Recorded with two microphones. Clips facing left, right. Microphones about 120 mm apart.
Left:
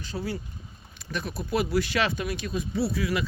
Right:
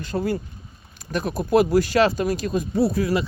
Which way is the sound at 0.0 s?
50° right (ahead or behind).